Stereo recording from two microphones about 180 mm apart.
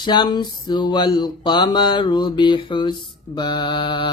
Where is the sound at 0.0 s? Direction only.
25° left (ahead or behind).